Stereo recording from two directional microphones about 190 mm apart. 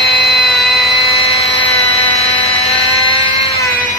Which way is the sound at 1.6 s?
30° left (ahead or behind).